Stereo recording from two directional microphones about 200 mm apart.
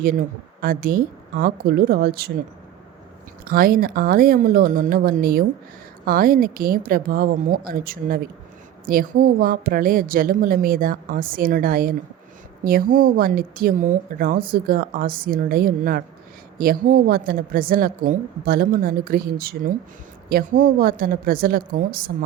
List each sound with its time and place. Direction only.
0.6 s speech: 45° right (ahead or behind)
3.4 s speech: 45° right (ahead or behind)